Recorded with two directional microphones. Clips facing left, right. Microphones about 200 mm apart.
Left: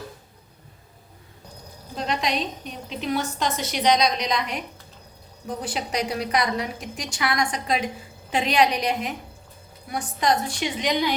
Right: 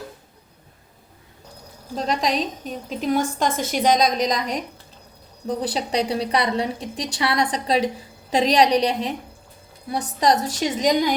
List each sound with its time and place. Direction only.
2.0 s a woman's voice: 40° right (ahead or behind)